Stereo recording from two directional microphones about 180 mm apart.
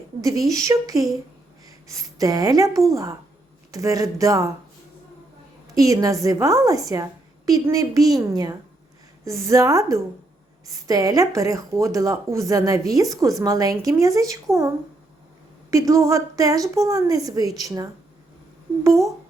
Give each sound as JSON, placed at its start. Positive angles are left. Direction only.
{"t": 0.2, "sound": "a woman's voice", "side_deg": -20}
{"t": 5.7, "sound": "a woman's voice", "side_deg": -20}
{"t": 15.7, "sound": "a woman's voice", "side_deg": -15}